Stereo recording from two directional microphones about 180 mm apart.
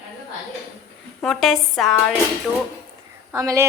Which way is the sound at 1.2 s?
Centre (ahead or behind).